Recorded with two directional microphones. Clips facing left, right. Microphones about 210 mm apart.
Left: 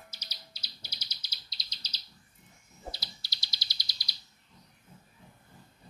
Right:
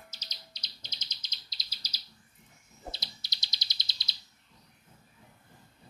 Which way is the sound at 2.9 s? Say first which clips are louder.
Even; 20° right (ahead or behind).